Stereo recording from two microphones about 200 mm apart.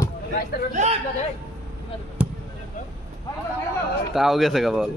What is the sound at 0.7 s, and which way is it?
Speech, 35° right (ahead or behind).